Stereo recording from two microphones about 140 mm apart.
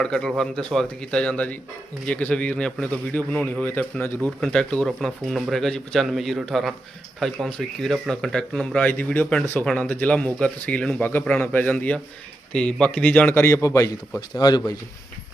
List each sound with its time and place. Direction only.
0.0 s speech: 5° left (ahead or behind); by 14.6 s 30° left (ahead or behind)